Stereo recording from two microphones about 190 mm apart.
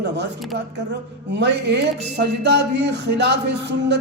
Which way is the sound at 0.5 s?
65° right (ahead or behind).